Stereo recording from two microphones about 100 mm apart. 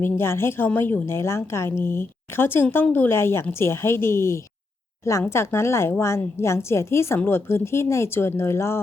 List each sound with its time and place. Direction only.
0.0 s a woman's voice: 25° left (ahead or behind)